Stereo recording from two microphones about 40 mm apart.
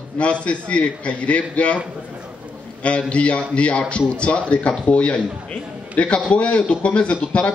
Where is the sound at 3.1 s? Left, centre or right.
Left.